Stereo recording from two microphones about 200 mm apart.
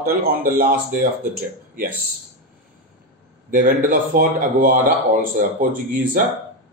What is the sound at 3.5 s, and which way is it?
A man's voice, 45° right (ahead or behind).